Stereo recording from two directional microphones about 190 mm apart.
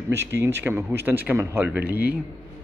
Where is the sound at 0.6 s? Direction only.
10° right (ahead or behind).